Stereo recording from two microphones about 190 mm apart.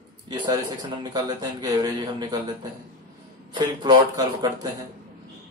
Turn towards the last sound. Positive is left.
turn(degrees=-20)  # may be behind; listen again after turning